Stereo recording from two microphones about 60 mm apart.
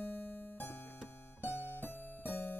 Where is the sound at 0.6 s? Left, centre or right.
Left.